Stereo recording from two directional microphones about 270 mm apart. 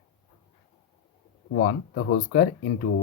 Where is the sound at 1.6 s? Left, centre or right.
Left.